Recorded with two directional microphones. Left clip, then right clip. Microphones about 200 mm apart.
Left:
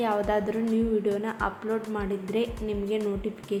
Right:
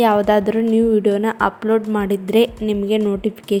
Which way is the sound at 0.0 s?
40° right (ahead or behind).